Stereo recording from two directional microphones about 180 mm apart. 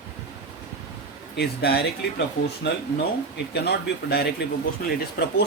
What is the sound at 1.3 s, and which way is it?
Speech, 60° left (ahead or behind).